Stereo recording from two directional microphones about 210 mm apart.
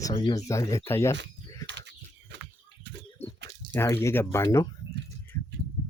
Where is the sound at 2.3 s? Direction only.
55° right (ahead or behind).